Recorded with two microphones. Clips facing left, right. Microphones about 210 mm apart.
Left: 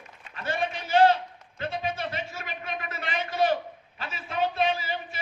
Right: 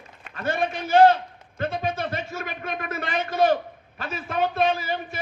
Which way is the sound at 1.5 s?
50° right (ahead or behind).